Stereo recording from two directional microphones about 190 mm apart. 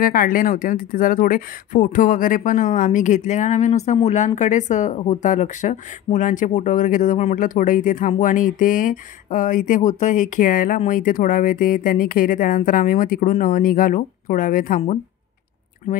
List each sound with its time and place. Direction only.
0.0 s speech: 50° left (ahead or behind)